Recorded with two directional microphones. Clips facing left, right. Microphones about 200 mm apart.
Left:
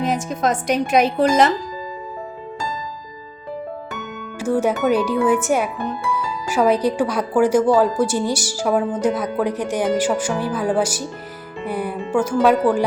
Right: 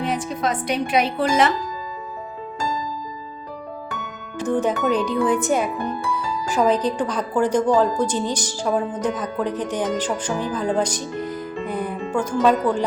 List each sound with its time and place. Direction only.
0.0 s speech: 45° left (ahead or behind)
4.4 s a woman's voice: 10° left (ahead or behind)